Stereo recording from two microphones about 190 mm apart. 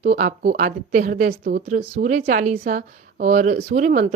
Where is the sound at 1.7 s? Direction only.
45° right (ahead or behind).